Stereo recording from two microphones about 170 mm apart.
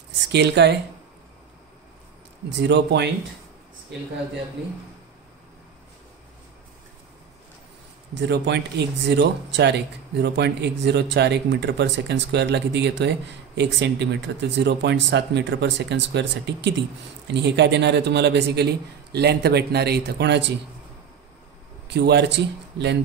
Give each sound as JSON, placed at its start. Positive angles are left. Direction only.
{"t": 0.3, "sound": "a man's voice", "side_deg": -80}
{"t": 2.6, "sound": "a man's voice", "side_deg": -85}
{"t": 8.2, "sound": "a man's voice", "side_deg": -90}
{"t": 21.8, "sound": "a man's voice", "side_deg": -75}